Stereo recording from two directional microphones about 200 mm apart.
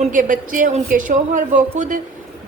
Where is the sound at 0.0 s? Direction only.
40° right (ahead or behind).